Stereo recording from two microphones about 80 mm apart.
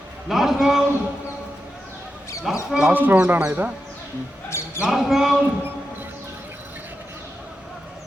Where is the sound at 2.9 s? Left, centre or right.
Right.